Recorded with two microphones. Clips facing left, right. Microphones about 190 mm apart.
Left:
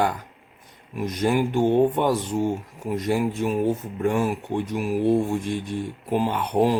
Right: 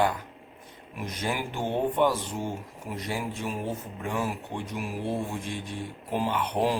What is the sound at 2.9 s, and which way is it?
Speech, 50° left (ahead or behind).